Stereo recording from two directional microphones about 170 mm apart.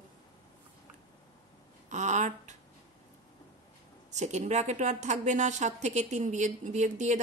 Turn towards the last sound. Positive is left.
turn(degrees=-45)  # may be behind; listen again after turning